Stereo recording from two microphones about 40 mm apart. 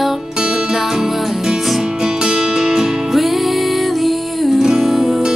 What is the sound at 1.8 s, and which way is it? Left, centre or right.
Music, centre.